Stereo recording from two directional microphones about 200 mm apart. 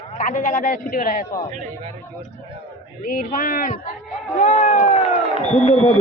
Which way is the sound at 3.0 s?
45° left (ahead or behind).